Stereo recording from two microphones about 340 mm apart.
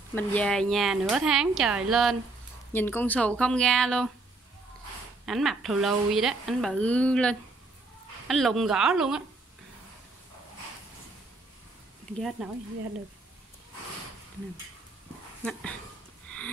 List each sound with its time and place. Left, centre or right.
0.1 s a woman's voice: centre
5.2 s a woman's voice: centre
12.1 s a woman's voice: centre